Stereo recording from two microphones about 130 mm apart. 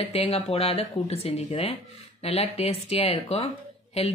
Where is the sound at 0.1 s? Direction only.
50° left (ahead or behind).